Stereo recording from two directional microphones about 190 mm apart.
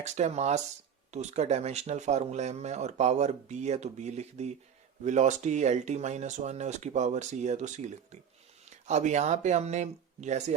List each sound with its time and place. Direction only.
0.0 s speech: 35° right (ahead or behind)